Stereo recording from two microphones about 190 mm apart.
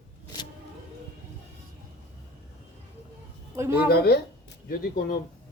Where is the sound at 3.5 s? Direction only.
15° right (ahead or behind).